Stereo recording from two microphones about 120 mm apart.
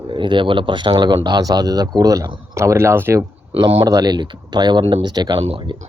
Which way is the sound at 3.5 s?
45° right (ahead or behind).